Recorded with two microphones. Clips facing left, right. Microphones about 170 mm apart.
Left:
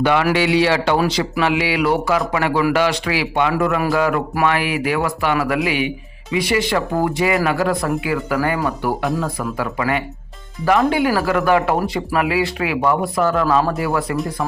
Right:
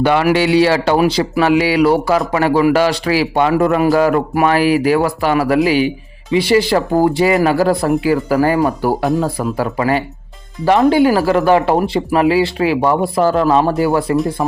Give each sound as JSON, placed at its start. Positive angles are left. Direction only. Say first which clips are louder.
{"t": 0.0, "sound": "speech", "louder": "right 3 dB", "side_deg": -35}